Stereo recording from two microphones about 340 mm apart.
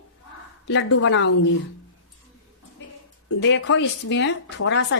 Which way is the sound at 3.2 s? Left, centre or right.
Left.